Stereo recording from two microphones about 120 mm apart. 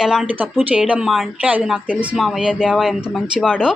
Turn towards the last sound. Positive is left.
turn(degrees=-5)  # may be behind; listen again after turning